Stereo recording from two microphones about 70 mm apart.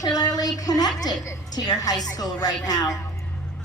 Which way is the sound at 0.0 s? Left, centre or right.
Left.